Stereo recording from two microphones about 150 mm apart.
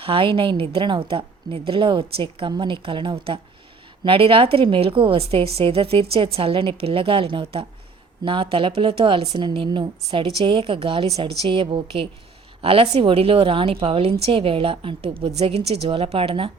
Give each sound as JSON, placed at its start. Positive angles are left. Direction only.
{"t": 0.0, "sound": "a woman's voice", "side_deg": -35}